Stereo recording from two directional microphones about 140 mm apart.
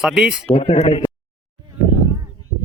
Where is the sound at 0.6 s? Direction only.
50° left (ahead or behind).